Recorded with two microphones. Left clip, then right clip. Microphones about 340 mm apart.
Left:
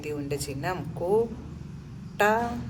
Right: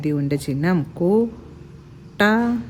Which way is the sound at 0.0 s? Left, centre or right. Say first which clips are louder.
Right 8 dB; right.